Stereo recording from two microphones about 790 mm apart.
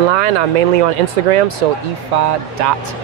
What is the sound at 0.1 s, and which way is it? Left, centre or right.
Speech, right.